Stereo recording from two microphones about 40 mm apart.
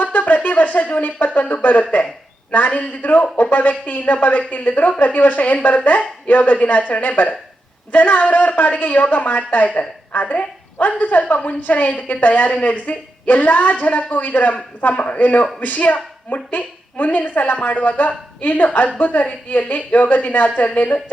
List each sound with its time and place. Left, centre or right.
0.0 s a woman's voice: left